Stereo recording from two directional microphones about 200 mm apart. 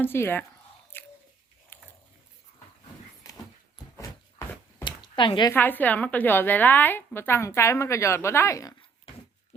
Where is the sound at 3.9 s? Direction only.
15° left (ahead or behind).